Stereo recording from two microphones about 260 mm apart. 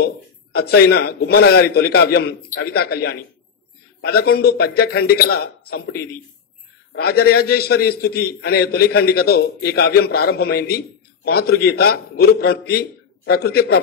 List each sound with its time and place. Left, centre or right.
0.0 s a man's voice: left